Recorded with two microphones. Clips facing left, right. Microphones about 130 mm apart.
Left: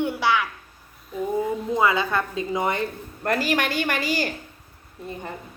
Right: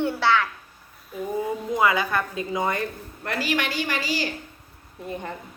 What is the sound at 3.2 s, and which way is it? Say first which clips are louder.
A woman's voice: left 3 dB; 45° left (ahead or behind).